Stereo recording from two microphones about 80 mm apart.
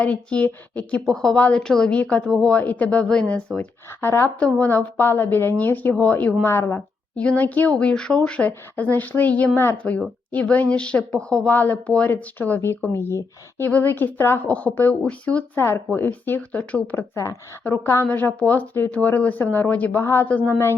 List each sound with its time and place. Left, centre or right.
0.0 s speech: centre
4.0 s speech: left
4.4 s speech: centre
6.4 s speech: left
7.2 s speech: centre
12.9 s speech: left; by 15.4 s centre
15.5 s speech: left